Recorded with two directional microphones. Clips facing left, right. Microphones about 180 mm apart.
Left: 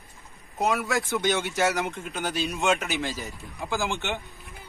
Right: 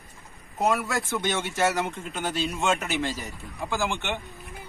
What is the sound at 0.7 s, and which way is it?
Speech, centre (ahead or behind).